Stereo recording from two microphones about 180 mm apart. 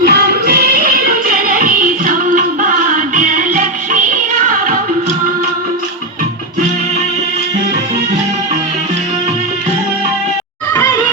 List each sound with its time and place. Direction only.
0.0 s music: 60° right (ahead or behind)